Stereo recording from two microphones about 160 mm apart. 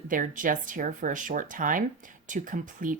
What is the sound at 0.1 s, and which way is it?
Speech, 55° right (ahead or behind).